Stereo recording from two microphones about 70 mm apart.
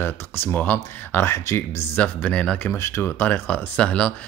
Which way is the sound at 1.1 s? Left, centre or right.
Left.